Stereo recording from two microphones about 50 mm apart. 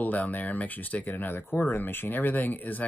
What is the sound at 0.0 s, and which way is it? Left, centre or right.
Speech, left.